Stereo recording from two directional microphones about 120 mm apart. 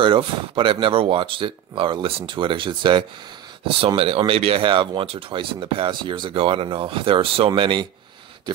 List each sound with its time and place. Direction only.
0.0 s speech: 45° right (ahead or behind)